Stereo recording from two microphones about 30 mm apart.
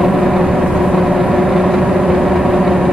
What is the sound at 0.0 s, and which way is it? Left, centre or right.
Vehicle, centre.